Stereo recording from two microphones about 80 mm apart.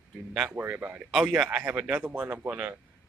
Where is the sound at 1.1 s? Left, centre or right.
Centre; by 2.5 s right.